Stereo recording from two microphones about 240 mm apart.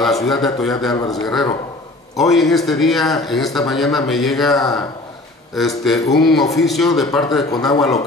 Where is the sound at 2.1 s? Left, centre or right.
Centre.